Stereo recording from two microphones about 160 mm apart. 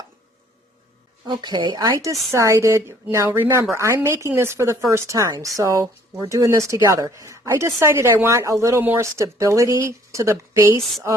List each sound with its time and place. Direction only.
1.3 s a woman's voice: 25° right (ahead or behind)